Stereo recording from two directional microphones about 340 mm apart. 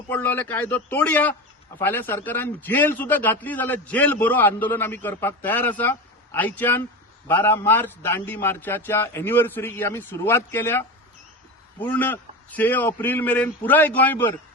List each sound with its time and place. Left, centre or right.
0.1 s a man's voice: centre